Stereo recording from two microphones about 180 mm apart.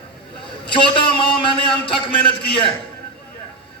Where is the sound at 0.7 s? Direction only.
25° left (ahead or behind).